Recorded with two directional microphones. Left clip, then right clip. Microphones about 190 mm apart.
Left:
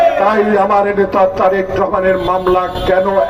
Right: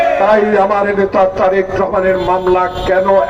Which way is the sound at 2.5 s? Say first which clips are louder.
Right 1 dB; 25° left (ahead or behind).